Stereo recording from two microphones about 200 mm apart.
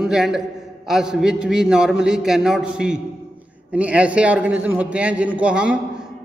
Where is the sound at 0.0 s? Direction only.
Centre (ahead or behind).